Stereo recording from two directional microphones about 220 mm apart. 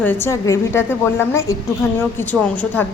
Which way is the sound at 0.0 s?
10° left (ahead or behind).